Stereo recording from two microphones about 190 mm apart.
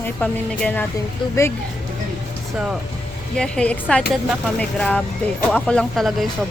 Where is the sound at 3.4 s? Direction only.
5° left (ahead or behind).